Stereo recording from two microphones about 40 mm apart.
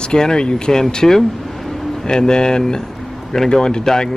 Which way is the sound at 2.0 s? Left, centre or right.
Centre.